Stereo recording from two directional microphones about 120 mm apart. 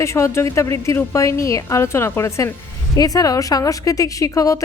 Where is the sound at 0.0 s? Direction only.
25° left (ahead or behind).